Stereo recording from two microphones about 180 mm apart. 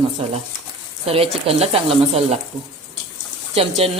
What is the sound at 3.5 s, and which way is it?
Speech, 35° right (ahead or behind).